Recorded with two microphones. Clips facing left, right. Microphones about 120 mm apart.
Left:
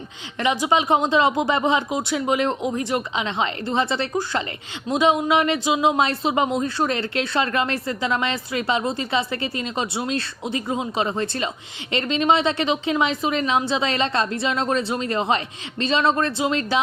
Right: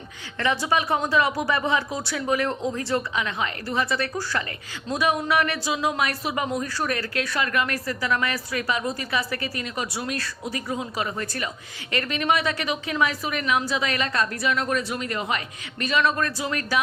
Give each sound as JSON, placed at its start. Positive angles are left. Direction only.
{"t": 0.3, "sound": "speech", "side_deg": 15}